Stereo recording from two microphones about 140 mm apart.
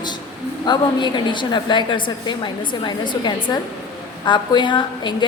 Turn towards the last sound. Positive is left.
turn(degrees=35)  # may be behind; listen again after turning